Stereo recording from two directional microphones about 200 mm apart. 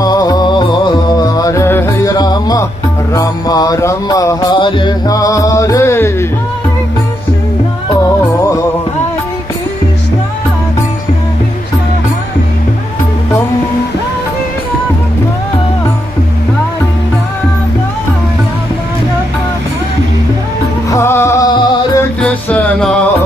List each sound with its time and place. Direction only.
0.0 s music: 20° left (ahead or behind)
7.9 s music: 15° left (ahead or behind)
20.9 s music: 15° left (ahead or behind)
22.2 s music: 5° left (ahead or behind)